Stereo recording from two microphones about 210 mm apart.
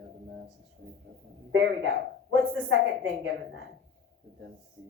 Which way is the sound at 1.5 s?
65° right (ahead or behind).